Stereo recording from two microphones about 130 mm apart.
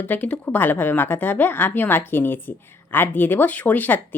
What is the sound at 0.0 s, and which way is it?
A woman's voice, 10° left (ahead or behind).